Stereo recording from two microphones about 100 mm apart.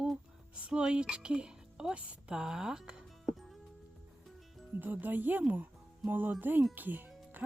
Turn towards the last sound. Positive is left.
turn(degrees=-20)  # may be behind; listen again after turning